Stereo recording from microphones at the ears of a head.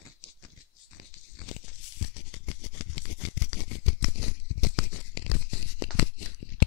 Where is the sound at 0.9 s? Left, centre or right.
Left.